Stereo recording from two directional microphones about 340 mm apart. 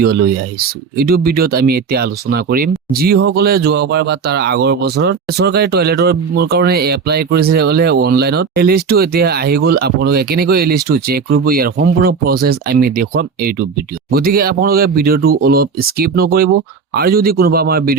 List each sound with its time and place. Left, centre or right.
0.0 s speech: right